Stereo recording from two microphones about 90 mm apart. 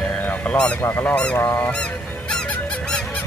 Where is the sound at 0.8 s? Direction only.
25° left (ahead or behind).